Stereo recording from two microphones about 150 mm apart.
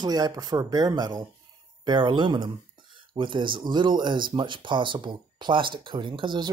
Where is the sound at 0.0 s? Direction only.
25° right (ahead or behind).